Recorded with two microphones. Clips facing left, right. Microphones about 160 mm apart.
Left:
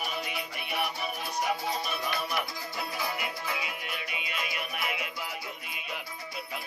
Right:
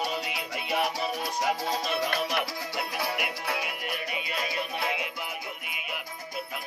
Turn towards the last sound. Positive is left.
turn(degrees=-25)  # may be behind; listen again after turning